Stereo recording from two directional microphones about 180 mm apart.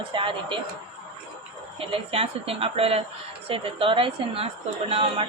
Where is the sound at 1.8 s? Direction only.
30° right (ahead or behind).